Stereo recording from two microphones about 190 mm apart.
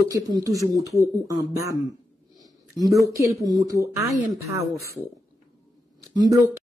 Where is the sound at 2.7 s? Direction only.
20° right (ahead or behind).